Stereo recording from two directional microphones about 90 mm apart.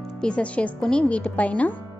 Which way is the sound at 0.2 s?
15° left (ahead or behind).